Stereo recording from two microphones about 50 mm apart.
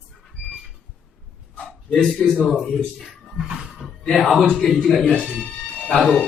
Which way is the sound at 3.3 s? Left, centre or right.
Centre.